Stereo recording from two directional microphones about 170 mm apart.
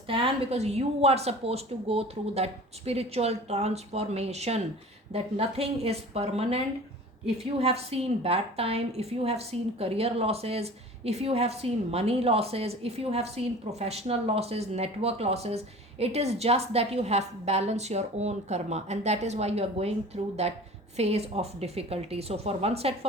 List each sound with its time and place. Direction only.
0.1 s a woman's voice: 35° right (ahead or behind)